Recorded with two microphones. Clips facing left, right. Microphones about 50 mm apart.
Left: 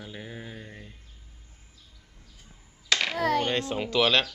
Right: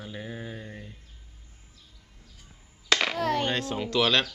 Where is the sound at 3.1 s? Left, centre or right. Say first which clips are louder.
Left 1 dB; centre.